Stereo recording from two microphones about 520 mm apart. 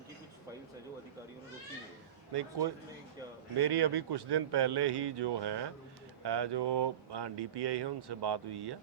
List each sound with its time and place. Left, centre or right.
2.3 s speech: right